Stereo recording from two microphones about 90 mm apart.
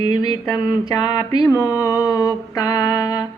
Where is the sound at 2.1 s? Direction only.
45° left (ahead or behind).